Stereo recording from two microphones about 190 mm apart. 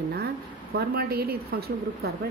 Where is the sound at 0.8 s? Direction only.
55° right (ahead or behind).